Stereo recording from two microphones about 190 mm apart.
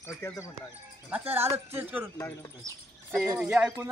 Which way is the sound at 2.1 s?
15° left (ahead or behind).